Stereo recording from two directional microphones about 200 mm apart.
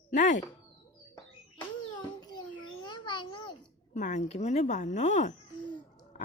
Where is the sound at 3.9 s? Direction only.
40° left (ahead or behind).